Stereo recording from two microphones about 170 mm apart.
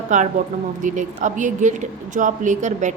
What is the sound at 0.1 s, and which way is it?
Speech, 45° right (ahead or behind).